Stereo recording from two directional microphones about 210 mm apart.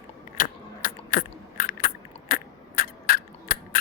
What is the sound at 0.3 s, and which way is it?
Biting, 40° left (ahead or behind).